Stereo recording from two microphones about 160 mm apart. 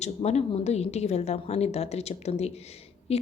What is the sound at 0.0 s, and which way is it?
A woman's voice, 40° left (ahead or behind).